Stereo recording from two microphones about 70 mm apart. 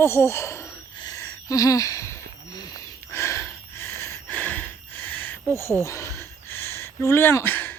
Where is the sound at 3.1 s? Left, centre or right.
Left.